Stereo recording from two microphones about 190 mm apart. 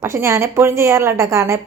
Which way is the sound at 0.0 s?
15° right (ahead or behind).